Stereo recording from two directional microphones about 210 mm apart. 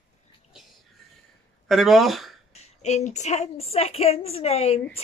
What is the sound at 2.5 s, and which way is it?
A woman's voice, 30° left (ahead or behind).